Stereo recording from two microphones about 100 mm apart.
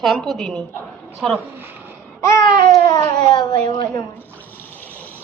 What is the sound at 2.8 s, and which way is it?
Speech, 45° left (ahead or behind).